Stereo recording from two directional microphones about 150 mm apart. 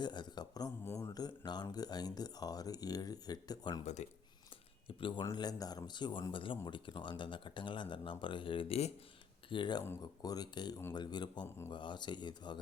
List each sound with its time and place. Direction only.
0.0 s speech: 30° left (ahead or behind)
4.0 s speech: 50° left (ahead or behind)
4.9 s speech: 35° left (ahead or behind)
9.5 s speech: 30° left (ahead or behind)